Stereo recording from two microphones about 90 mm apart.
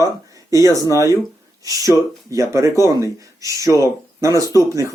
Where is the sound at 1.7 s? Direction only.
35° right (ahead or behind).